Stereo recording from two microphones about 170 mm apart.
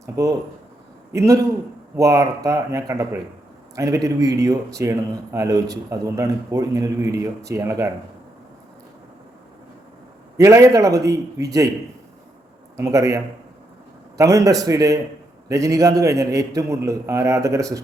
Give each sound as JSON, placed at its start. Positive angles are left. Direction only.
{"t": 0.0, "sound": "a man's voice", "side_deg": -20}
{"t": 10.3, "sound": "a man's voice", "side_deg": -20}
{"t": 12.7, "sound": "a man's voice", "side_deg": -20}